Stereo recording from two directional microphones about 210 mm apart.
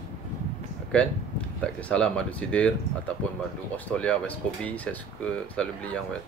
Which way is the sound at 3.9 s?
5° left (ahead or behind).